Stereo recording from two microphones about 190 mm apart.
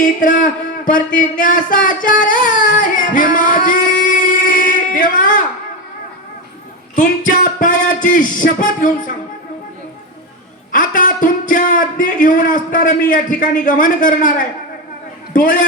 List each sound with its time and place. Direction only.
0.2 s a man's voice: 45° left (ahead or behind)
6.9 s a man's voice: 45° left (ahead or behind)
10.7 s a man's voice: 45° left (ahead or behind)